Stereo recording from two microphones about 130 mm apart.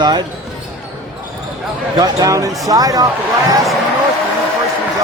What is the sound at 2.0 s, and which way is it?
A man's voice, 30° right (ahead or behind).